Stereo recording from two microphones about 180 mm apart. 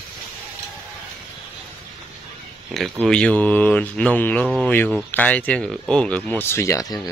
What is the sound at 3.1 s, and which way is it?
Speech, 5° left (ahead or behind).